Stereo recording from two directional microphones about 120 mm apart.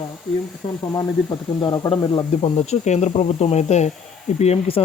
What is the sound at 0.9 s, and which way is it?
Speech, 35° left (ahead or behind).